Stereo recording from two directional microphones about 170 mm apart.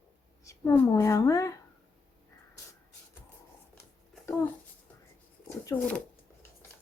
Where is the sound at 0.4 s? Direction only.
15° left (ahead or behind).